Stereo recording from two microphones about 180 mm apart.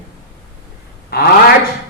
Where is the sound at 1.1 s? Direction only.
60° left (ahead or behind).